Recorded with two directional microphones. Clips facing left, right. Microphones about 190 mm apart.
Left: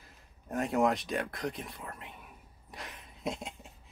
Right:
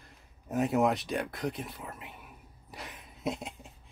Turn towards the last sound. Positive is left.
turn(degrees=0)  # may be behind; listen again after turning